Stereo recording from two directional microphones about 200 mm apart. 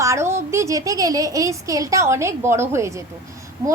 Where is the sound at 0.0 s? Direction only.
15° right (ahead or behind).